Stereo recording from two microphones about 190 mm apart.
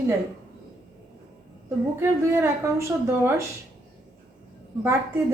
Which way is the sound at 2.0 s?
15° right (ahead or behind).